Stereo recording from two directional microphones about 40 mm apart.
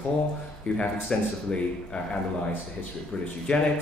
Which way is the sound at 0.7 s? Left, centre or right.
Left.